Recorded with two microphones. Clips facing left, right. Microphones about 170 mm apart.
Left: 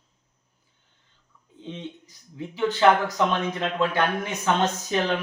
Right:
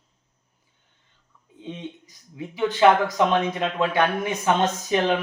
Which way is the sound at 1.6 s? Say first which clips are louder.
Right 1 dB; 15° right (ahead or behind).